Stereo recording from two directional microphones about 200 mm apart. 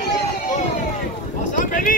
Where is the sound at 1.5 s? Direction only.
40° left (ahead or behind).